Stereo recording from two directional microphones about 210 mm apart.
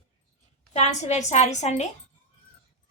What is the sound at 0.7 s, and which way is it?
A woman's voice, 35° left (ahead or behind).